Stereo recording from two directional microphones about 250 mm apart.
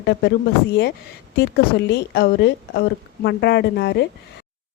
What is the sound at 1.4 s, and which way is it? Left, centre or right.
Speech, left.